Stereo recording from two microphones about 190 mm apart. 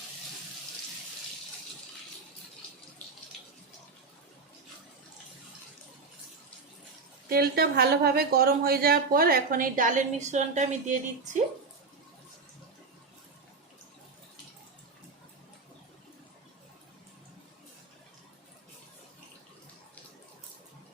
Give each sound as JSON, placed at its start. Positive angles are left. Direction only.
{"t": 7.3, "sound": "a woman's voice", "side_deg": -55}